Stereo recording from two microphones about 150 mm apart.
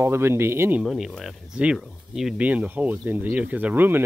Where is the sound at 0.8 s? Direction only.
Centre (ahead or behind).